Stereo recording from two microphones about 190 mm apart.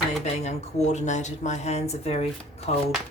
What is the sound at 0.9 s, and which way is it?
A woman's voice, 40° left (ahead or behind).